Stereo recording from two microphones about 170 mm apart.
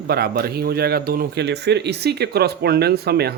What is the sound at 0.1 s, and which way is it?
Speech, 65° right (ahead or behind).